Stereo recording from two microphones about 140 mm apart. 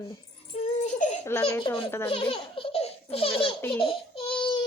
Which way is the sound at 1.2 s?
20° left (ahead or behind).